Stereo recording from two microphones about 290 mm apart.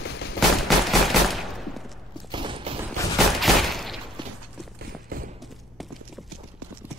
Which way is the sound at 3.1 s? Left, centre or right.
Centre.